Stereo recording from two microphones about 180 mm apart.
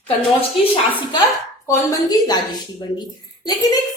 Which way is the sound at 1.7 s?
20° left (ahead or behind).